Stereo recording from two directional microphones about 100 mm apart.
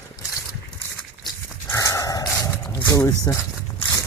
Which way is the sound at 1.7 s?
35° left (ahead or behind).